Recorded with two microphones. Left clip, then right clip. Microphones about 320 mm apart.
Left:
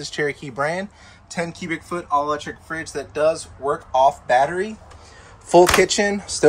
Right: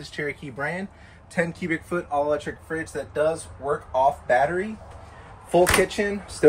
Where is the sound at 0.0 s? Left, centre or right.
Left.